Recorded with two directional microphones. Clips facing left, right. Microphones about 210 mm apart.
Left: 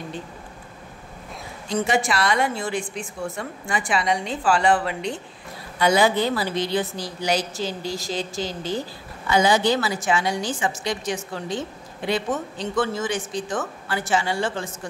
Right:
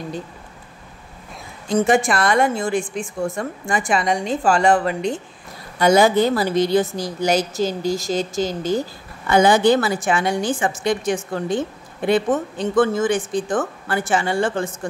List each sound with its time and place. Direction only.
1.7 s a woman's voice: 50° right (ahead or behind)